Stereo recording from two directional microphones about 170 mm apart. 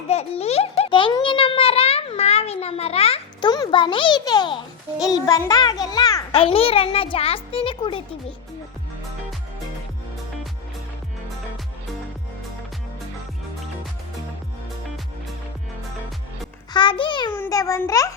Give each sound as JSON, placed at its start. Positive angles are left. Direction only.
{"t": 0.1, "sound": "a child's voice", "side_deg": 40}
{"t": 6.3, "sound": "a child's voice", "side_deg": 35}
{"t": 16.7, "sound": "a child's voice", "side_deg": 30}
{"t": 17.3, "sound": "a child's voice", "side_deg": 15}